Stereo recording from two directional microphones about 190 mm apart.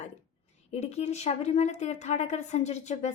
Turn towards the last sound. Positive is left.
turn(degrees=35)  # may be behind; listen again after turning